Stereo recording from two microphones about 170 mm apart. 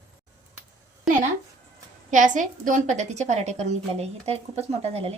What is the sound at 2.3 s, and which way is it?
A woman's voice, 50° right (ahead or behind).